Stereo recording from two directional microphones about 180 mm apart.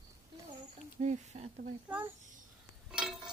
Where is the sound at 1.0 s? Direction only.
40° right (ahead or behind).